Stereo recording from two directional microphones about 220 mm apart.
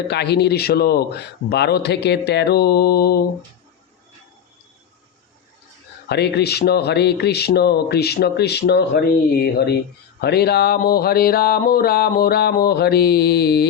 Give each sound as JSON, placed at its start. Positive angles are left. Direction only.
{"t": 0.1, "sound": "speech", "side_deg": 50}
{"t": 6.1, "sound": "speech", "side_deg": 50}